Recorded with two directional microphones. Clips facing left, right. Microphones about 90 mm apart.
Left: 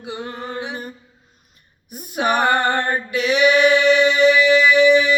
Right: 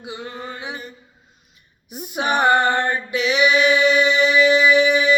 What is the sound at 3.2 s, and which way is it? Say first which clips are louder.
Singing: left 2 dB; 45° left (ahead or behind).